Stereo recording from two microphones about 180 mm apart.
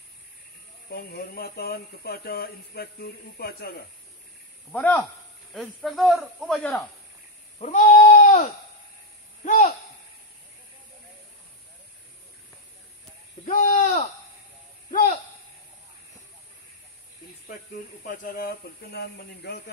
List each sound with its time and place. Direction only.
0.9 s speech: 60° left (ahead or behind)
4.7 s speech: 10° left (ahead or behind)
7.5 s goat: 40° left (ahead or behind)
9.4 s a sound: 45° left (ahead or behind)
13.5 s a sound: 45° left (ahead or behind)
18.0 s speech: 55° left (ahead or behind)